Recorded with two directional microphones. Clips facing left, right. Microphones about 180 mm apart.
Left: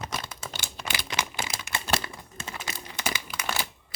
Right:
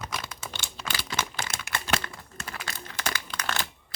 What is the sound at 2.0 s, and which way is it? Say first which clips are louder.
Crumpling: left 1 dB; 15° left (ahead or behind).